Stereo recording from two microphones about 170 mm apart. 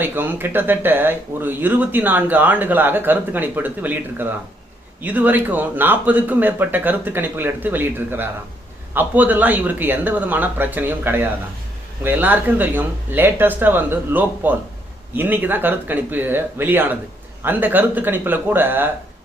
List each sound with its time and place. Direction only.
0.0 s speech: 10° right (ahead or behind)